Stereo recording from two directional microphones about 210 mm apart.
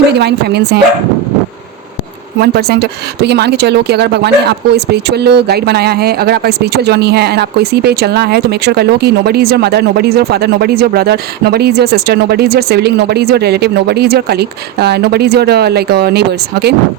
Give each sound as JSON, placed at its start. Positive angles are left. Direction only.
{"t": 0.1, "sound": "a woman's voice", "side_deg": -50}
{"t": 2.4, "sound": "a woman's voice", "side_deg": -50}